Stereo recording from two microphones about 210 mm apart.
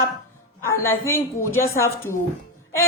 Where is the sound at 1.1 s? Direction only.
10° left (ahead or behind).